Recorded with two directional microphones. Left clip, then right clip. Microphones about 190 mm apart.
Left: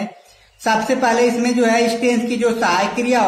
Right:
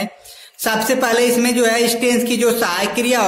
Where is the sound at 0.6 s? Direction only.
45° right (ahead or behind).